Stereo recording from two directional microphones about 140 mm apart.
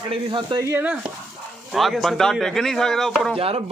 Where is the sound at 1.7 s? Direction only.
Centre (ahead or behind).